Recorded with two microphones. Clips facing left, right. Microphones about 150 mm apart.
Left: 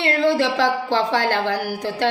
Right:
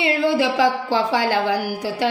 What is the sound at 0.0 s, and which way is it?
A woman's voice, 5° right (ahead or behind).